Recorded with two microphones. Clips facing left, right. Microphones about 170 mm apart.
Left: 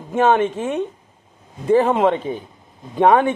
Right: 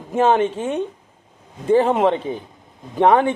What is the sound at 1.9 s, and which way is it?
A man's voice, 35° right (ahead or behind).